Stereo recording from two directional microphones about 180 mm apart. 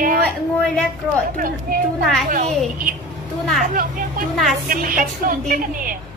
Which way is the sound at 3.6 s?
50° right (ahead or behind).